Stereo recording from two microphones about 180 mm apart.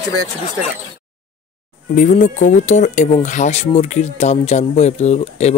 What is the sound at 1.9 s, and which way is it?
Speech, 45° left (ahead or behind).